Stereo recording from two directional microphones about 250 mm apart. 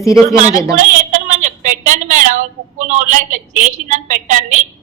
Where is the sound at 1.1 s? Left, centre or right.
Right.